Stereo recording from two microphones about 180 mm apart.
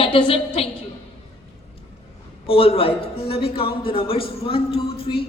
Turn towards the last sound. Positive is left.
turn(degrees=30)  # may be behind; listen again after turning